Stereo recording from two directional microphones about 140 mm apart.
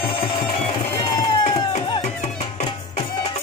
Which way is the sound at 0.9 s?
30° left (ahead or behind).